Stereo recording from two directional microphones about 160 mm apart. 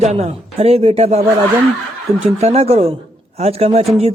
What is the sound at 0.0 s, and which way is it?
Speech, 40° right (ahead or behind).